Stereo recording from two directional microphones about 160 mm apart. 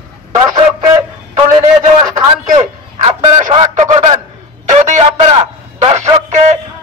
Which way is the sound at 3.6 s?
40° right (ahead or behind).